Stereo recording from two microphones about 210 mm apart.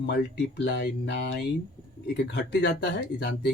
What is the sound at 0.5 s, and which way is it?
Speech, 55° left (ahead or behind).